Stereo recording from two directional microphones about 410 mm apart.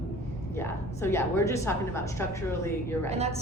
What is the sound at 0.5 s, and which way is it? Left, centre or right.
A woman's voice, centre.